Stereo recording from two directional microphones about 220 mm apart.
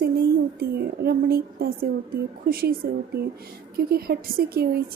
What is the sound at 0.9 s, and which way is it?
A woman's voice, 45° right (ahead or behind).